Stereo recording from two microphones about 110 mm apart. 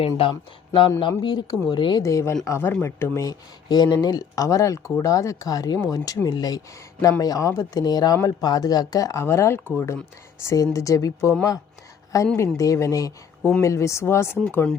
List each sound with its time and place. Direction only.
0.2 s speech: 50° left (ahead or behind)
2.0 s speech: 30° left (ahead or behind)